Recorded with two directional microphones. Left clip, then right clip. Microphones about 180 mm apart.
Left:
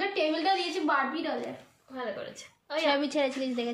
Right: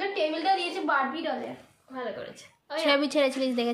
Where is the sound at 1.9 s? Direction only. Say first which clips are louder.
Right 1 dB; centre (ahead or behind).